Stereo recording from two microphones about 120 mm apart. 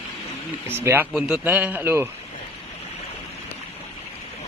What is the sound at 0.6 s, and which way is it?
Speech, 20° right (ahead or behind).